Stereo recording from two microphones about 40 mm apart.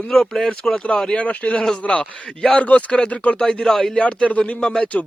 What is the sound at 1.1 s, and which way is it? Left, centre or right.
Speech, left.